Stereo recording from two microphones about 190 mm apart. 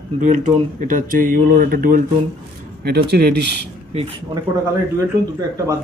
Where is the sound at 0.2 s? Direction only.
40° right (ahead or behind); by 3.7 s 60° right (ahead or behind).